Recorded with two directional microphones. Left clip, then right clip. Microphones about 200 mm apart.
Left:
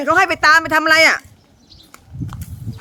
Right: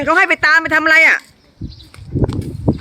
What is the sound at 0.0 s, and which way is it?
A woman's voice, centre (ahead or behind).